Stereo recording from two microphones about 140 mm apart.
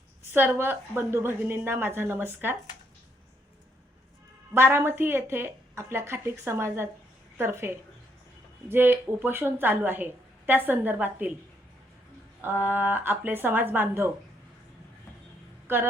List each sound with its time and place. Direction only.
0.3 s a woman's voice: 15° right (ahead or behind)
4.5 s a woman's voice: 15° right (ahead or behind)
8.7 s a woman's voice: 15° right (ahead or behind)
12.4 s a woman's voice: 15° right (ahead or behind)
15.6 s speech: 15° right (ahead or behind)